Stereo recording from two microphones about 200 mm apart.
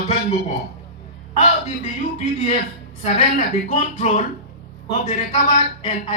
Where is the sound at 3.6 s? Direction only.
35° left (ahead or behind).